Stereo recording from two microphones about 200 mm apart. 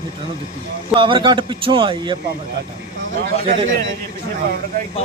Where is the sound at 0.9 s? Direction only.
25° right (ahead or behind).